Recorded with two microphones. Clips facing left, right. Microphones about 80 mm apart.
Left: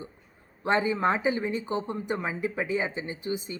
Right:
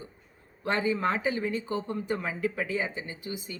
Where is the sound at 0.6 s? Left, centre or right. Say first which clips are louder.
Left 3 dB; left.